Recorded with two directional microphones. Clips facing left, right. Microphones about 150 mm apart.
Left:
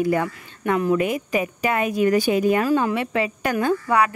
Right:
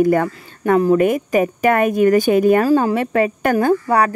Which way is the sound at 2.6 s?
40° right (ahead or behind).